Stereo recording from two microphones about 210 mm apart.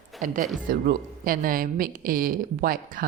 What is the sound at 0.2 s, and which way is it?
A woman's voice, 40° right (ahead or behind).